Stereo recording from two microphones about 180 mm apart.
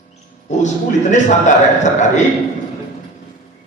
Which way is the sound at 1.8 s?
40° left (ahead or behind).